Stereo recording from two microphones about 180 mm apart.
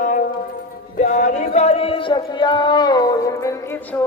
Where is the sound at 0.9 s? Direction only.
45° left (ahead or behind).